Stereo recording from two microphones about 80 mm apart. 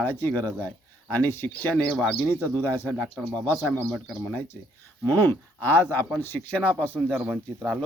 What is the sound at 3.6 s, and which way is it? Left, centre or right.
Speech, left.